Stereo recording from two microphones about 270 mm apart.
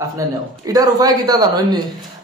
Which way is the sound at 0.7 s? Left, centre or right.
Centre.